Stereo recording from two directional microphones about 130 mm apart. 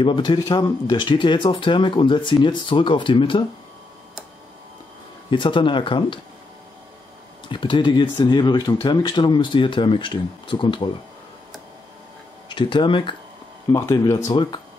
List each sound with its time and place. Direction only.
0.0 s speech: 40° left (ahead or behind)
5.3 s speech: 40° left (ahead or behind)
7.4 s speech: 40° left (ahead or behind)
12.4 s speech: 35° left (ahead or behind)
13.7 s speech: 25° left (ahead or behind)